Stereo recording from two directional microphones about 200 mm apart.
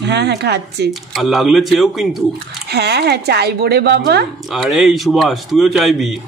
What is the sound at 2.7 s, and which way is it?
Speech, 55° right (ahead or behind).